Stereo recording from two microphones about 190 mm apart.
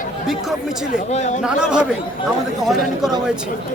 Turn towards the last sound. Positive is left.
turn(degrees=0)  # may be behind; listen again after turning